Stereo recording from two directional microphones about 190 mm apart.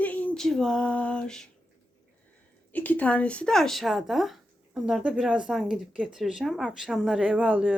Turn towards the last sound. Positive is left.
turn(degrees=-10)  # may be behind; listen again after turning